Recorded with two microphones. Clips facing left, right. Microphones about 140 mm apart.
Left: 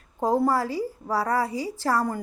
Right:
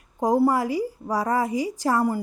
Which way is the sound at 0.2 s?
15° right (ahead or behind).